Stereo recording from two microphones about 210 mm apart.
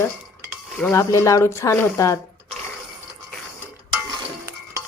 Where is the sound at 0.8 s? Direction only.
15° left (ahead or behind).